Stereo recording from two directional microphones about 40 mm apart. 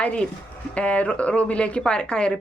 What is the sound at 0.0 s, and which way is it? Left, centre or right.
Speech, left.